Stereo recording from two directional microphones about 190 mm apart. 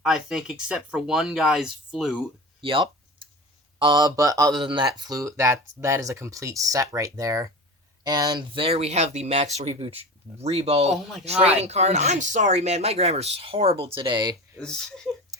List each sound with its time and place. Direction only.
0.0 s speech: centre (ahead or behind)
2.6 s a sound: 25° right (ahead or behind)
3.8 s speech: 25° right (ahead or behind)
14.6 s speech: 5° left (ahead or behind)